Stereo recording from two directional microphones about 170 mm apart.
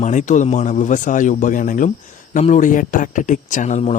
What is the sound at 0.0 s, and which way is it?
Speech, 45° left (ahead or behind).